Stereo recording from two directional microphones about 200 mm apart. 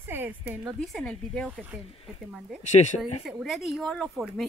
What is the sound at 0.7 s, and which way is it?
Speech, 5° left (ahead or behind).